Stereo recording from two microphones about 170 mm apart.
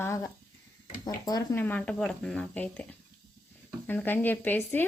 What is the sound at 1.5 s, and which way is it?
A woman's voice, 10° left (ahead or behind).